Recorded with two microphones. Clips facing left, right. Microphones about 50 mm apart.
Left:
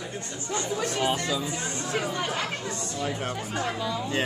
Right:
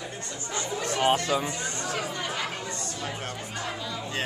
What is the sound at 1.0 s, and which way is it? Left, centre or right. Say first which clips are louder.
Speech: right 3 dB; right.